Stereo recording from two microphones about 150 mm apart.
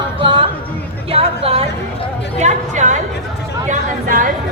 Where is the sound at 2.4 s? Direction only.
55° right (ahead or behind).